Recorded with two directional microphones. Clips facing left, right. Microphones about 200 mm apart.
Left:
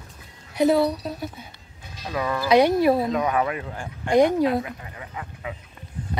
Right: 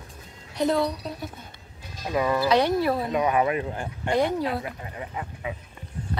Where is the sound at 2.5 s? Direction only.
15° left (ahead or behind).